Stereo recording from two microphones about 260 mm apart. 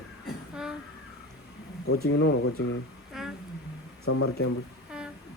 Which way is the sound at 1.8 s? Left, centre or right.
Left.